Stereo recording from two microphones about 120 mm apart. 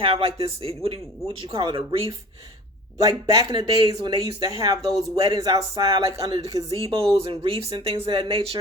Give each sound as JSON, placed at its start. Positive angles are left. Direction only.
{"t": 0.0, "sound": "speech", "side_deg": -50}
{"t": 3.0, "sound": "speech", "side_deg": -30}
{"t": 4.8, "sound": "speech", "side_deg": 0}
{"t": 5.1, "sound": "speech", "side_deg": -30}
{"t": 6.7, "sound": "speech", "side_deg": -50}